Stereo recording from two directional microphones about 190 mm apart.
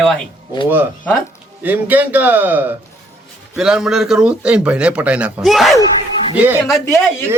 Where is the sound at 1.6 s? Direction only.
10° right (ahead or behind).